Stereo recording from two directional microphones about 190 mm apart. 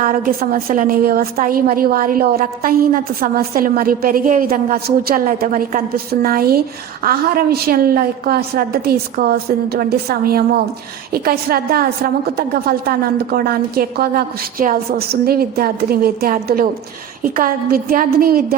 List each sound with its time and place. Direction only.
0.0 s a woman's voice: 45° right (ahead or behind)